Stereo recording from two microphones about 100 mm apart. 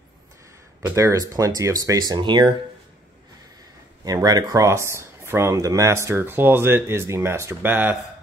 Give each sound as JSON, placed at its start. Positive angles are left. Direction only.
{"t": 0.8, "sound": "speech", "side_deg": -30}
{"t": 4.0, "sound": "speech", "side_deg": -40}